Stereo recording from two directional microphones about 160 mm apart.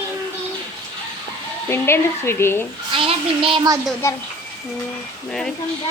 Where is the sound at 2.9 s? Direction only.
35° right (ahead or behind).